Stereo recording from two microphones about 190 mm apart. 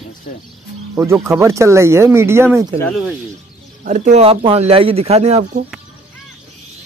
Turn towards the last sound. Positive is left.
turn(degrees=-35)  # may be behind; listen again after turning